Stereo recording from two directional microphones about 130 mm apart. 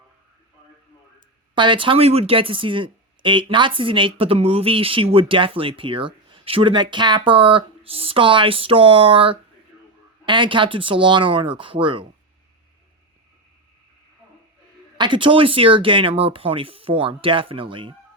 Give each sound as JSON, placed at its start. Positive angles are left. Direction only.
{"t": 1.5, "sound": "speech", "side_deg": -40}
{"t": 14.9, "sound": "speech", "side_deg": -35}